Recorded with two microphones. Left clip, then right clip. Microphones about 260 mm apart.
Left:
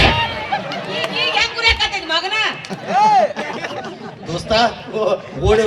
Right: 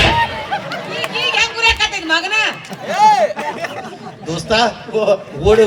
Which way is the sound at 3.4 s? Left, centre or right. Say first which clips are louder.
Right 2 dB; centre.